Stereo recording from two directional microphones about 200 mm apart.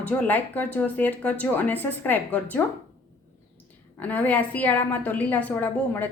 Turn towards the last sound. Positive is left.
turn(degrees=10)  # may be behind; listen again after turning